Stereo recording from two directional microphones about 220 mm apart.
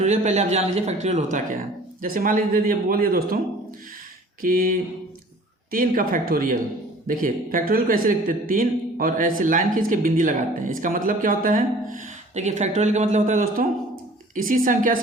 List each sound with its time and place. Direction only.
0.0 s speech: 30° right (ahead or behind)